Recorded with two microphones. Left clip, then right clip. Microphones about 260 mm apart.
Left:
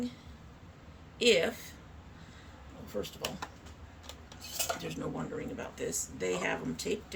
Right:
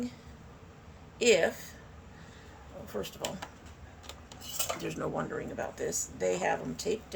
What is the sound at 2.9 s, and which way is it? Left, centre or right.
Speech, right.